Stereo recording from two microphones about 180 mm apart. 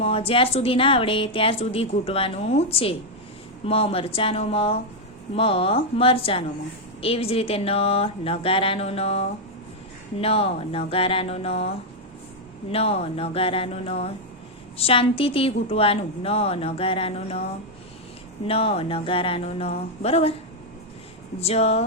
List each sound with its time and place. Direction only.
0.0 s a woman's voice: 30° left (ahead or behind)
12.7 s a woman's voice: 35° left (ahead or behind)
18.4 s a woman's voice: 35° left (ahead or behind)
21.4 s a woman's voice: 35° left (ahead or behind)